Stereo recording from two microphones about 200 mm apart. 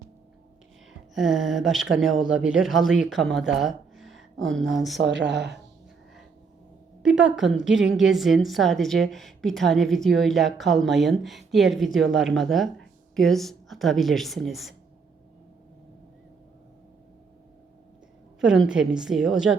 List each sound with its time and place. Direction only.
1.1 s a woman's voice: centre (ahead or behind)
3.3 s a sound: centre (ahead or behind)
4.9 s speech: 60° right (ahead or behind)
7.0 s a woman's voice: 5° right (ahead or behind)
18.3 s a woman's voice: 5° right (ahead or behind)